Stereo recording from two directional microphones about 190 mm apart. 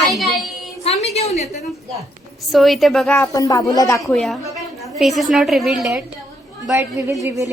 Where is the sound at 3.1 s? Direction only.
15° left (ahead or behind).